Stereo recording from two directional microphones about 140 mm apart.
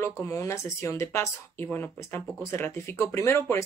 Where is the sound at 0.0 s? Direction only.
20° left (ahead or behind).